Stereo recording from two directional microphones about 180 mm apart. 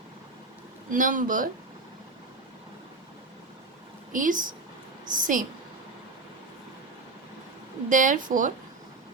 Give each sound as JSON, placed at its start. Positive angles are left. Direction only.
{"t": 0.9, "sound": "speech", "side_deg": -45}
{"t": 4.1, "sound": "speech", "side_deg": -45}
{"t": 7.9, "sound": "speech", "side_deg": -45}